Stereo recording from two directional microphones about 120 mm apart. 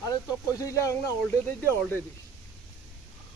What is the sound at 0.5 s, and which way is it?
Speech, 25° left (ahead or behind).